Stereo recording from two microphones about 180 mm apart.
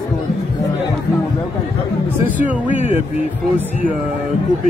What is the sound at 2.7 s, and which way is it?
Speech, 40° left (ahead or behind).